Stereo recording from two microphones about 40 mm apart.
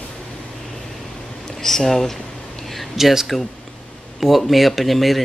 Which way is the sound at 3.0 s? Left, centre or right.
Centre.